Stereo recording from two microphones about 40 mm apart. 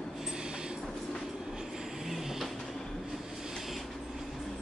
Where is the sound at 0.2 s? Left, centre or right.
Centre.